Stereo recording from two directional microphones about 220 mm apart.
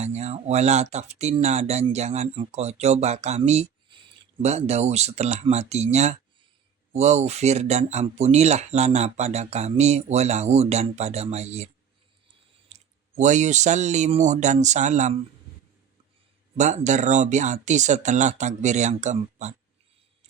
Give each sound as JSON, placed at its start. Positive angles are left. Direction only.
{"t": 0.0, "sound": "speech", "side_deg": -30}
{"t": 16.6, "sound": "speech", "side_deg": -30}